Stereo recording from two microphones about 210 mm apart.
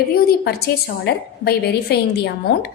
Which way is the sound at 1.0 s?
55° left (ahead or behind).